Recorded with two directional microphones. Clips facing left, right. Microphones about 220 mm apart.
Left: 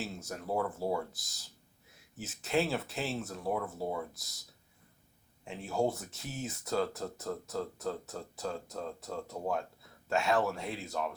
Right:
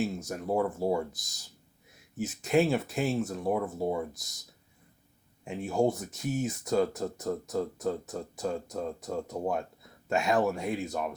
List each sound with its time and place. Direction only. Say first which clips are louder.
0.0 s speech: right 8 dB; 15° right (ahead or behind)
5.5 s speech: right 5 dB; 15° right (ahead or behind)